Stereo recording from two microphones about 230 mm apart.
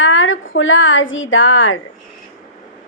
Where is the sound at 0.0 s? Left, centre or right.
Left.